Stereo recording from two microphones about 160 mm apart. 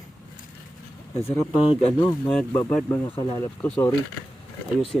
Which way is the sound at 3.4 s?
10° left (ahead or behind).